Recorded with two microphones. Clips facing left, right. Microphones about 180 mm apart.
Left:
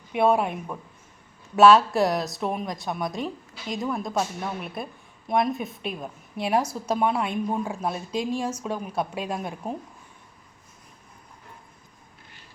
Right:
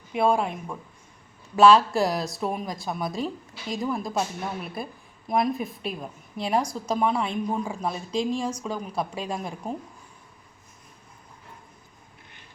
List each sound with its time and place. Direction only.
0.1 s a woman's voice: 5° left (ahead or behind)